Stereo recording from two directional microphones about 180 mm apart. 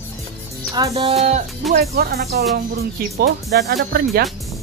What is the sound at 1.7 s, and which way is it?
Speech, 55° right (ahead or behind).